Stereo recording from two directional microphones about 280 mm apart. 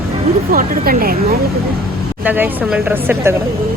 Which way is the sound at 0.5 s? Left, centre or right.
Right.